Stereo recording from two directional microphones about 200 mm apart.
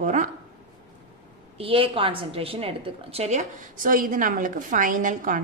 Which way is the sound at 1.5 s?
25° right (ahead or behind).